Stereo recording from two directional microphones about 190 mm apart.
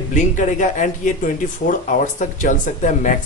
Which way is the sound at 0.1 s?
40° left (ahead or behind).